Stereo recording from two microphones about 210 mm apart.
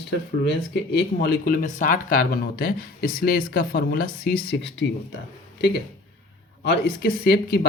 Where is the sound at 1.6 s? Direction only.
35° left (ahead or behind); by 4.9 s 55° left (ahead or behind).